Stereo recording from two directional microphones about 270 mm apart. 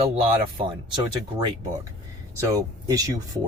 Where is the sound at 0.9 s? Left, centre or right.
Centre.